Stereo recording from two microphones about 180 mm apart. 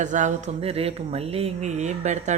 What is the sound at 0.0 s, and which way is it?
Speech, 45° right (ahead or behind).